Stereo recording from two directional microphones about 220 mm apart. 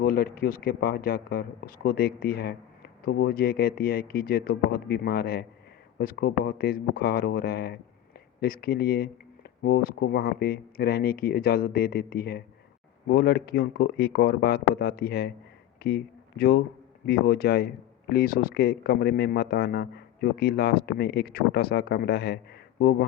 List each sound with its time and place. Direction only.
0.0 s speech: 45° left (ahead or behind)